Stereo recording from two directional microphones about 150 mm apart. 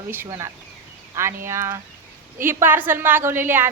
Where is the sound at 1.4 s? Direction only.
20° right (ahead or behind).